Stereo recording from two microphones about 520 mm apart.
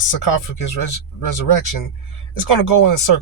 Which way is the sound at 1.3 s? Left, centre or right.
Left.